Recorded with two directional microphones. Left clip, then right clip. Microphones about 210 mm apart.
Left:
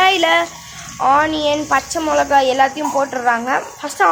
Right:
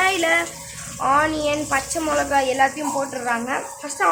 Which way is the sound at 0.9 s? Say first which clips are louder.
Left 5 dB; 10° left (ahead or behind).